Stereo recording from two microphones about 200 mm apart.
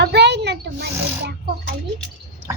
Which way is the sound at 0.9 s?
10° right (ahead or behind).